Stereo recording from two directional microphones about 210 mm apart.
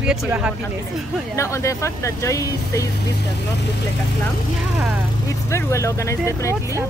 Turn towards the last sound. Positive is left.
turn(degrees=15)  # may be behind; listen again after turning